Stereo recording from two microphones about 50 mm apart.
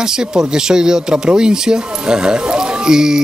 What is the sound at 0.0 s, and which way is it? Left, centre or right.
Speech, centre.